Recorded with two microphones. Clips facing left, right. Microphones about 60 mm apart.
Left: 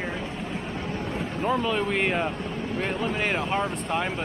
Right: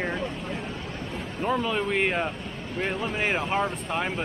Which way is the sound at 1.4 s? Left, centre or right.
Centre.